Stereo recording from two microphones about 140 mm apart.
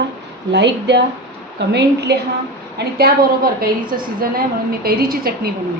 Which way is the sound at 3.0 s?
90° right.